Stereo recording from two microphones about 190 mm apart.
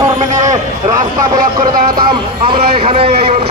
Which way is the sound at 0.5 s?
20° right (ahead or behind).